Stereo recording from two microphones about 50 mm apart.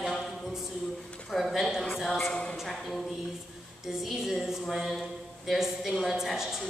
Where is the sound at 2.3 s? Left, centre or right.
Centre.